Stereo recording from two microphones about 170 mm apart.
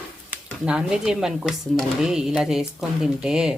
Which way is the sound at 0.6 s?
5° right (ahead or behind).